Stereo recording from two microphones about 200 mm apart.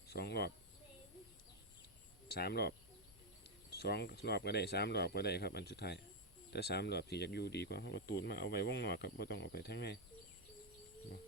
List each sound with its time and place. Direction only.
0.1 s a sound: 55° left (ahead or behind)
2.2 s speech: 55° left (ahead or behind)
3.8 s speech: 55° left (ahead or behind)